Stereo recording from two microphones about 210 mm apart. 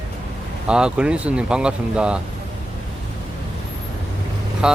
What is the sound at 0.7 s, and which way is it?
Speech, 5° right (ahead or behind).